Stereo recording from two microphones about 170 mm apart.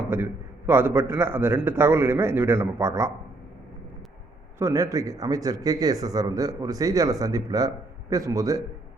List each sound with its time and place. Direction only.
0.0 s a sound: 15° right (ahead or behind)
0.7 s a man's voice: 15° right (ahead or behind)
4.5 s speech: 15° right (ahead or behind)